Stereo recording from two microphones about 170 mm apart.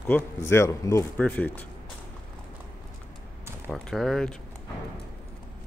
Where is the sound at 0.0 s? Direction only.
10° left (ahead or behind).